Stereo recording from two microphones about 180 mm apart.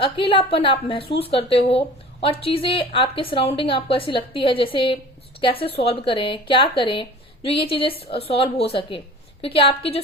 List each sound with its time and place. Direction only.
0.0 s a woman's voice: 30° left (ahead or behind)